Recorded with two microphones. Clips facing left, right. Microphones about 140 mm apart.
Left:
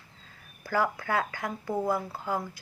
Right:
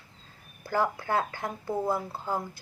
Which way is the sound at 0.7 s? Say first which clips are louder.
Even; 25° right (ahead or behind).